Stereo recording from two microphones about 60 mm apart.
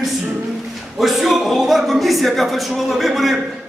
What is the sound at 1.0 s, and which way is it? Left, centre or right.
Speech, centre.